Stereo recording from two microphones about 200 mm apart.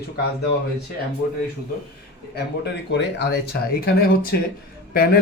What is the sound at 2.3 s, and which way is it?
Speech, 55° left (ahead or behind).